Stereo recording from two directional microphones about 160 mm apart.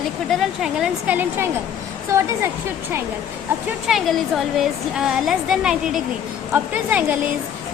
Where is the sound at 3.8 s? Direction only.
Centre (ahead or behind).